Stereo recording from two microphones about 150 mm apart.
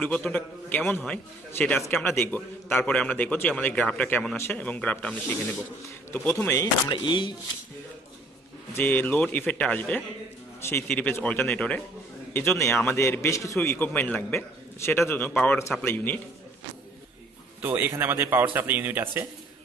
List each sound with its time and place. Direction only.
0.0 s a man's voice: 5° left (ahead or behind)
6.4 s speech: 20° left (ahead or behind)
7.0 s speech: 30° left (ahead or behind)
8.7 s a man's voice: 15° left (ahead or behind)
17.6 s speech: 10° right (ahead or behind)